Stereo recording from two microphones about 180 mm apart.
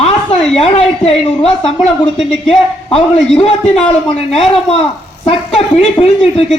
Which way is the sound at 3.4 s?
35° left (ahead or behind).